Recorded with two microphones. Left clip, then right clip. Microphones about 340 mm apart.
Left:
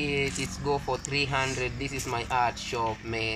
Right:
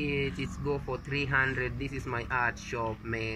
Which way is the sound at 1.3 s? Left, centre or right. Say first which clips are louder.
Even; centre.